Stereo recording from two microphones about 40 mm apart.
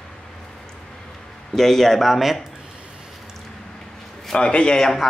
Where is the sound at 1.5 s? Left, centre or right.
Centre.